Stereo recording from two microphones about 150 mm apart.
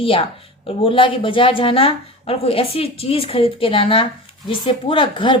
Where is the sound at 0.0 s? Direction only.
35° left (ahead or behind).